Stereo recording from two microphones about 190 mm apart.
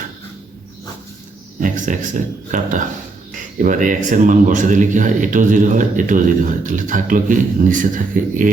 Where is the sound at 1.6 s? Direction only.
40° right (ahead or behind).